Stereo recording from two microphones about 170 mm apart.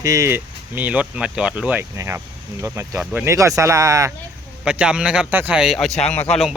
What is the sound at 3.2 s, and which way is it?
Speech, 20° right (ahead or behind).